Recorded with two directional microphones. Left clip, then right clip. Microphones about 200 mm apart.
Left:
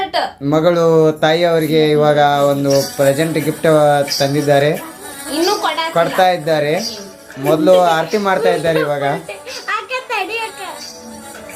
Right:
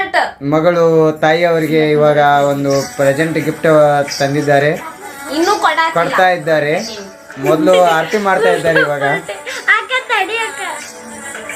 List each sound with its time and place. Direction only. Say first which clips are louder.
0.5 s speech: right 1 dB; 5° left (ahead or behind)
2.6 s music: left 1 dB; 30° left (ahead or behind)
3.0 s speech: right 1 dB; 5° left (ahead or behind)
8.1 s music: right 2 dB; 5° left (ahead or behind)